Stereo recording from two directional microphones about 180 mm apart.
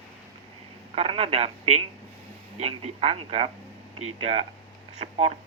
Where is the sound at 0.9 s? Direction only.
35° right (ahead or behind).